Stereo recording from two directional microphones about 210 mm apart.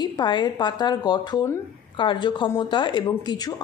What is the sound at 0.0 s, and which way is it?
Speech, 20° left (ahead or behind).